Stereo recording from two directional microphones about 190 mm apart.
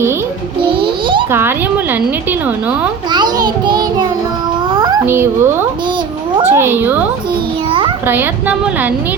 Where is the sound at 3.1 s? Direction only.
20° right (ahead or behind).